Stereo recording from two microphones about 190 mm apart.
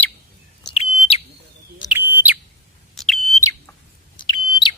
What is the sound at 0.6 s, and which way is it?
Bird, 30° left (ahead or behind).